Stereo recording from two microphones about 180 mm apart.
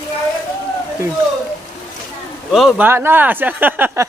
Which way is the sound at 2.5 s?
Centre (ahead or behind).